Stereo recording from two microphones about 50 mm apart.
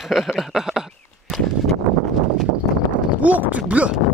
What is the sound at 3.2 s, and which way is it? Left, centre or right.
Speech, right.